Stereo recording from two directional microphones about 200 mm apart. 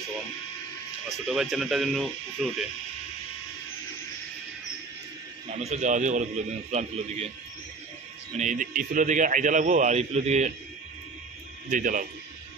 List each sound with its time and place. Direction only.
1.2 s speech: centre (ahead or behind)
5.6 s a man's voice: 35° right (ahead or behind)
8.4 s a man's voice: 40° right (ahead or behind)
11.7 s a man's voice: 40° right (ahead or behind)